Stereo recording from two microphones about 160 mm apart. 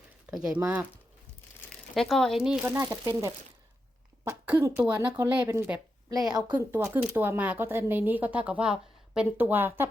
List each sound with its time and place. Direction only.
0.3 s a woman's voice: 5° right (ahead or behind)
2.0 s a woman's voice: centre (ahead or behind); by 3.1 s 20° right (ahead or behind)
4.2 s a woman's voice: 15° right (ahead or behind)
6.1 s a woman's voice: 25° right (ahead or behind)
6.5 s a woman's voice: 15° right (ahead or behind)